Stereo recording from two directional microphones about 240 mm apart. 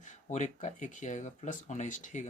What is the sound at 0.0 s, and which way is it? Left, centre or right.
Speech, left.